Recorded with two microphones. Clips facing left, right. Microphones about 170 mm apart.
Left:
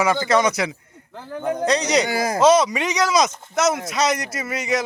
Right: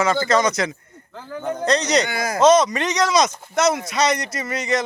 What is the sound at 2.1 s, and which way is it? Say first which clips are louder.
Speech: left 2 dB; 30° left (ahead or behind).